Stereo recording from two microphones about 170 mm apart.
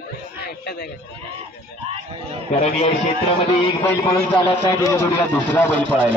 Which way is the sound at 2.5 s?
40° left (ahead or behind).